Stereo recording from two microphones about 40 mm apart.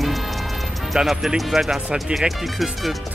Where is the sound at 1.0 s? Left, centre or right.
Centre.